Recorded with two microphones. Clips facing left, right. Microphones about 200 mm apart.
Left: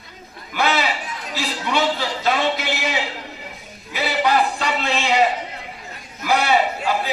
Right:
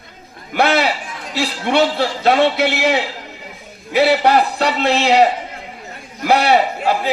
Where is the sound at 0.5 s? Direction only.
65° right (ahead or behind).